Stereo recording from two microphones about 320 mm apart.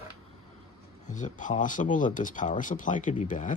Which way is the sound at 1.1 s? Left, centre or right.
Left.